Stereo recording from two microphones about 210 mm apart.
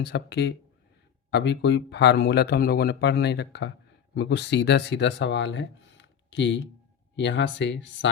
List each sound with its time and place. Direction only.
0.0 s speech: 55° left (ahead or behind)